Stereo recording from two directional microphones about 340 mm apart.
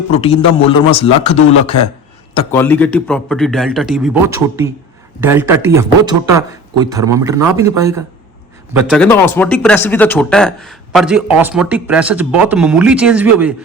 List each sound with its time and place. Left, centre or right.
0.1 s speech: centre
2.3 s a man's voice: centre